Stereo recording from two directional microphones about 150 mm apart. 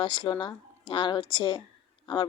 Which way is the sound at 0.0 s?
35° left (ahead or behind).